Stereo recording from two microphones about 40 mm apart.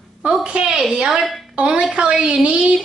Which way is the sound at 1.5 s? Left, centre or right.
Right.